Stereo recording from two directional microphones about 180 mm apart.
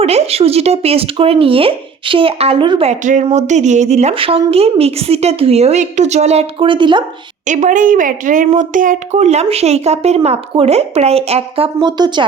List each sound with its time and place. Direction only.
0.0 s speech: 35° right (ahead or behind)
7.4 s speech: 45° right (ahead or behind); by 12.2 s 25° right (ahead or behind)